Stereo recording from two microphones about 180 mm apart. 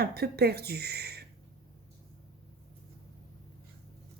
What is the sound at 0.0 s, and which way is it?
A woman's voice, 60° right (ahead or behind).